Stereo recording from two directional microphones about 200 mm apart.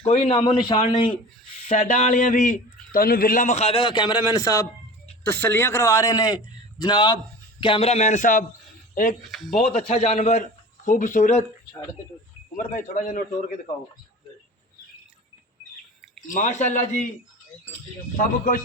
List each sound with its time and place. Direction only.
0.1 s a man's voice: 30° left (ahead or behind)
9.6 s a man's voice: 40° left (ahead or behind)
12.5 s a man's voice: 40° left (ahead or behind)
16.3 s a man's voice: 40° left (ahead or behind)
18.2 s speech: 45° left (ahead or behind)